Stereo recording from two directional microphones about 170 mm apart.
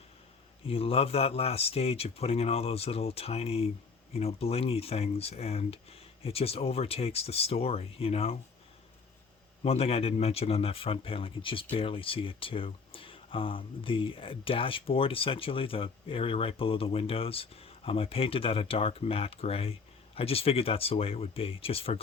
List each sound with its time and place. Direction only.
0.7 s speech: 35° left (ahead or behind)
9.6 s speech: 35° left (ahead or behind)